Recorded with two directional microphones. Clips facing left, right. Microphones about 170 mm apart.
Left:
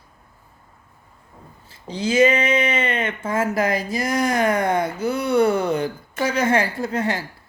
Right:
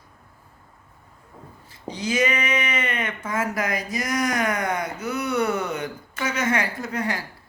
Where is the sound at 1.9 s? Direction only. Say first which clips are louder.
Left 7 dB; 30° left (ahead or behind).